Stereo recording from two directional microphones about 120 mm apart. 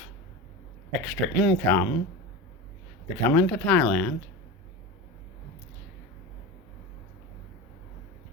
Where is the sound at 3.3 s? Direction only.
10° left (ahead or behind).